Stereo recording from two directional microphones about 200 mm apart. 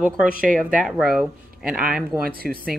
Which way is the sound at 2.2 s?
50° right (ahead or behind).